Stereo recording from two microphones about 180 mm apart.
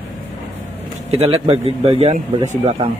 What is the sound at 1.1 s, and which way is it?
Speech, 35° right (ahead or behind).